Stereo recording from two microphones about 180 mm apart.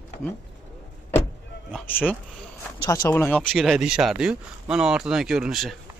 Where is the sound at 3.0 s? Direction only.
10° left (ahead or behind).